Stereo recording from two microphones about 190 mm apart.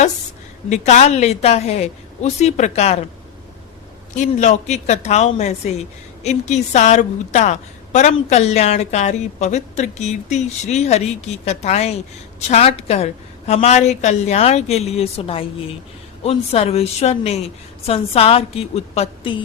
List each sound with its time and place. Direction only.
0.7 s a woman's voice: 35° left (ahead or behind)
4.2 s a woman's voice: 40° left (ahead or behind)